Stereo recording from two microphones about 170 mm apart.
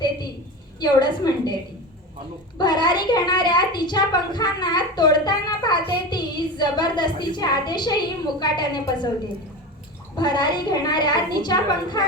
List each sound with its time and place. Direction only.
0.8 s a woman's voice: 25° left (ahead or behind)
2.6 s a woman's voice: 25° left (ahead or behind)
10.2 s a woman's voice: 25° left (ahead or behind)